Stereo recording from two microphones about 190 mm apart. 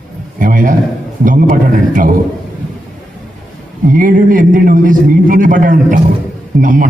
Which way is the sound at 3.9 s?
45° right (ahead or behind).